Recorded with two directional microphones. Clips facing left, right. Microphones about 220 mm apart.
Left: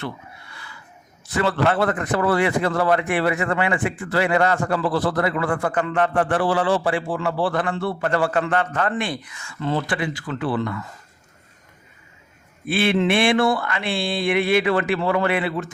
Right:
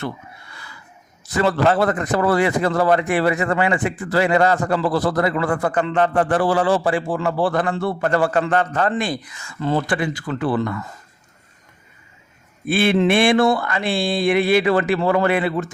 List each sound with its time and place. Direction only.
1.6 s a man's voice: 35° right (ahead or behind)
5.7 s a man's voice: 25° right (ahead or behind); by 10.8 s 45° right (ahead or behind)
12.6 s a man's voice: 45° right (ahead or behind)